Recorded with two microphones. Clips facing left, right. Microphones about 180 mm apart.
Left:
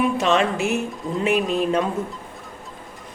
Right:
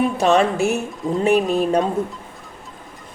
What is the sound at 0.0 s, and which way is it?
Speech, 40° right (ahead or behind).